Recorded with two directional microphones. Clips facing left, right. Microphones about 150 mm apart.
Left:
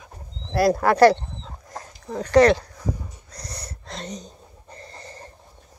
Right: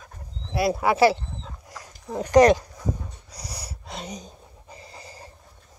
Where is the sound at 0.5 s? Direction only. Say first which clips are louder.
Left 4 dB; 5° right (ahead or behind).